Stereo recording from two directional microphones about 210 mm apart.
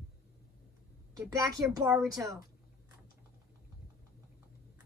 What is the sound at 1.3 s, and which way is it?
Speech, 15° right (ahead or behind).